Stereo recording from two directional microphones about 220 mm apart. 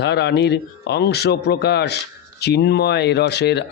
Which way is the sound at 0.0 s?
50° left (ahead or behind).